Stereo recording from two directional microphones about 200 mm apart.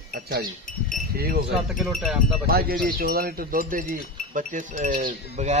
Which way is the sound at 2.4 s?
45° right (ahead or behind).